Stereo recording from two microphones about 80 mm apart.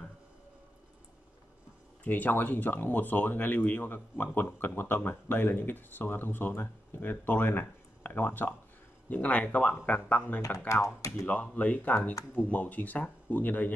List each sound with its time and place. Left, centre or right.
2.0 s speech: left